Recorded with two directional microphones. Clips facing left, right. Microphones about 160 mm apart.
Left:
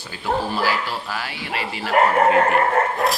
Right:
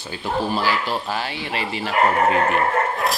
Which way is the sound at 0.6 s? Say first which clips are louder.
Right 1 dB; 25° right (ahead or behind).